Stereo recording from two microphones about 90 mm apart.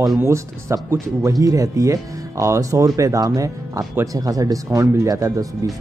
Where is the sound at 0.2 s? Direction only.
30° right (ahead or behind).